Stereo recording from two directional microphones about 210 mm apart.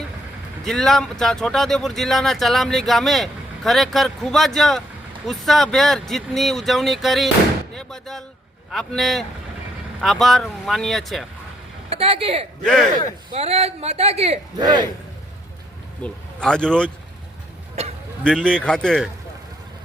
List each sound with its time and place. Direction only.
0.6 s speech: centre (ahead or behind)
11.9 s speech: 25° right (ahead or behind)
12.6 s speech: centre (ahead or behind)
13.3 s a man's voice: 30° right (ahead or behind)
16.0 s speech: 5° left (ahead or behind)
18.2 s speech: 5° left (ahead or behind)